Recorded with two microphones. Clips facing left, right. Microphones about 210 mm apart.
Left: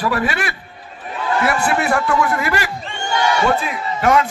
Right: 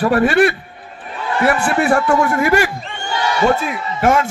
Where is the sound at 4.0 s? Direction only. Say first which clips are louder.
Right 1 dB; 45° right (ahead or behind).